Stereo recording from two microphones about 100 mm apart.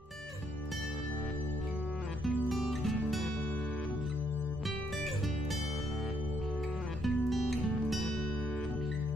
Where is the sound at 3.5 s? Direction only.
10° left (ahead or behind).